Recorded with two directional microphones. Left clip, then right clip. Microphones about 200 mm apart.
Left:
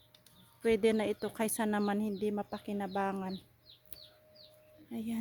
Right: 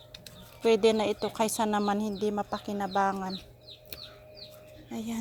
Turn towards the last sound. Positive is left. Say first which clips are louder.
# right 4 dB
turn(degrees=25)  # may be behind; listen again after turning